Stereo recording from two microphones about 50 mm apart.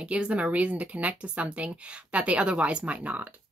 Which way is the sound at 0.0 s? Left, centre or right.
Right.